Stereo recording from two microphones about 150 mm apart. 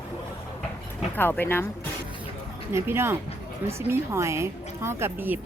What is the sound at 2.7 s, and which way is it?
A woman's voice, 15° right (ahead or behind).